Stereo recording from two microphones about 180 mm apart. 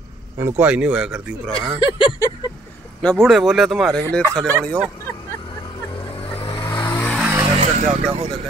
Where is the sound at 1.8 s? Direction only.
25° left (ahead or behind).